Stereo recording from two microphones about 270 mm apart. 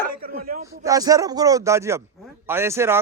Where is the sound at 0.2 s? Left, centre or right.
Right.